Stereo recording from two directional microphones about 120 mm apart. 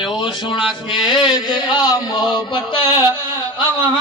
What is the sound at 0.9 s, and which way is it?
Music, 40° left (ahead or behind).